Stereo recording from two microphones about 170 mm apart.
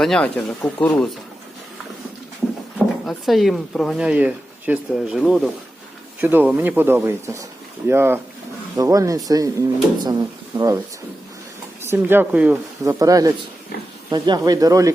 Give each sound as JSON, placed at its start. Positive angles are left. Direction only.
{"t": 0.0, "sound": "speech", "side_deg": 5}
{"t": 2.7, "sound": "speech", "side_deg": 0}
{"t": 11.8, "sound": "speech", "side_deg": -15}
{"t": 12.8, "sound": "speech", "side_deg": -20}